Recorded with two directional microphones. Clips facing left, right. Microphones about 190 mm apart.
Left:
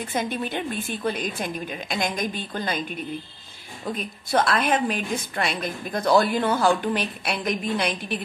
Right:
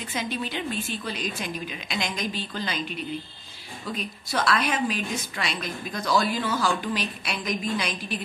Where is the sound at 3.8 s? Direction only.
55° left (ahead or behind).